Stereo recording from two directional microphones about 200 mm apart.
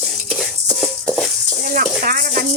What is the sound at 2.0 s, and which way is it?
Speech, 45° right (ahead or behind).